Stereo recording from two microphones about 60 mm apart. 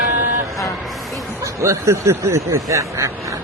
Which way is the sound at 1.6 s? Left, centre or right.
Right.